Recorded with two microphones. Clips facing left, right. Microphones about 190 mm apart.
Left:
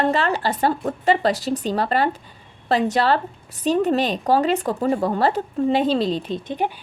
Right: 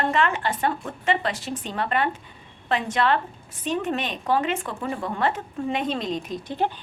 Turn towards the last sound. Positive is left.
turn(degrees=20)  # may be behind; listen again after turning